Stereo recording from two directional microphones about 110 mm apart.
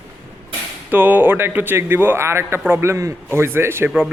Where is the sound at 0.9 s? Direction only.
15° right (ahead or behind).